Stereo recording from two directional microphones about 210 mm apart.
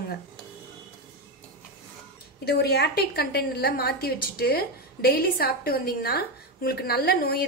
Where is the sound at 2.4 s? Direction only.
50° left (ahead or behind).